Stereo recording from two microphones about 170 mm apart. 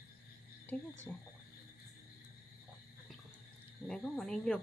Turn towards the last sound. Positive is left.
turn(degrees=5)  # may be behind; listen again after turning